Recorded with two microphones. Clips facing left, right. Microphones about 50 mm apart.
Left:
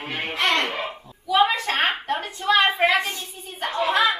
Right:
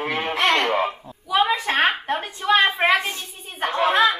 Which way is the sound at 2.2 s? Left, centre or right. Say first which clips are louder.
Right 1 dB; right.